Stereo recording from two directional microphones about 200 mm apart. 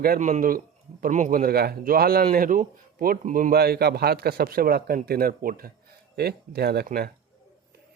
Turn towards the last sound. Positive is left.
turn(degrees=-50)  # may be behind; listen again after turning